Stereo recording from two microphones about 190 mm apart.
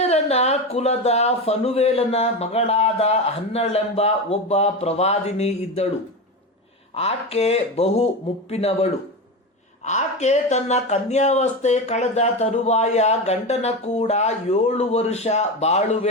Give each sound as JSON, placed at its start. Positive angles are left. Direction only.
{"t": 0.0, "sound": "speech", "side_deg": 35}
{"t": 6.9, "sound": "speech", "side_deg": 30}